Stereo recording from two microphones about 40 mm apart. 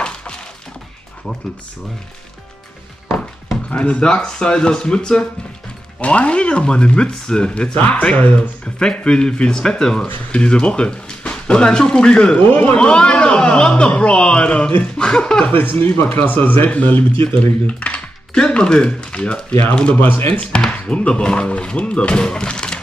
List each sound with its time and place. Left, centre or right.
0.0 s breaking: left
3.7 s a man's voice: left
5.9 s a man's voice: left
7.7 s speech: left
8.4 s a man's voice: left
10.3 s speech: left
12.4 s speech: left
12.7 s a man's voice: left
15.5 s speech: left
16.1 s speech: left
17.6 s computer keyboard: left
18.5 s a man's voice: left
20.0 s speech: left
20.8 s a man's voice: left